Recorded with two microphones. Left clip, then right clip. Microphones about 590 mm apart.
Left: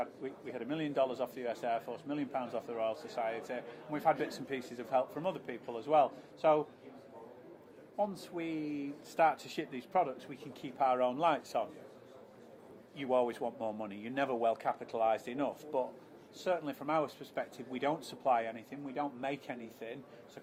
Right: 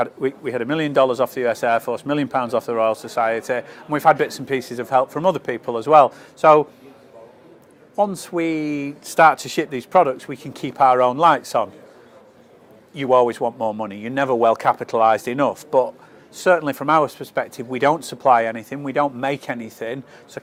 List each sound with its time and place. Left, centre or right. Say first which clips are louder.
0.0 s speech: right 18 dB; right
7.9 s speech: right 16 dB; right
12.9 s a man's voice: right 16 dB; right